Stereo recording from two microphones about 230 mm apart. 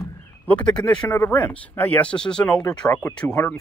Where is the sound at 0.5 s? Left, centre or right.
Centre.